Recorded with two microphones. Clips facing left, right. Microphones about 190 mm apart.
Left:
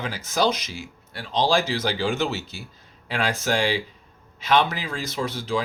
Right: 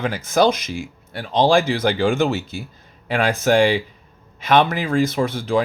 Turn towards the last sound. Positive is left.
turn(degrees=-55)  # may be behind; listen again after turning